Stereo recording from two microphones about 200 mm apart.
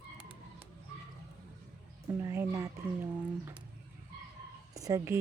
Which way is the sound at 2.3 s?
15° right (ahead or behind).